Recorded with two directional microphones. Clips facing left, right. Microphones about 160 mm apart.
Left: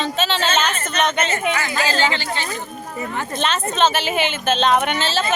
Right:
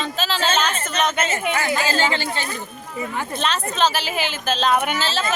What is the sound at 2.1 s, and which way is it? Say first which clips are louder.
Speech: even; 45° right (ahead or behind).